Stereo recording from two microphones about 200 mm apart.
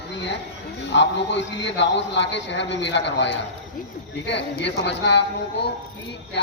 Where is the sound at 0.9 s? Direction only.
65° left (ahead or behind).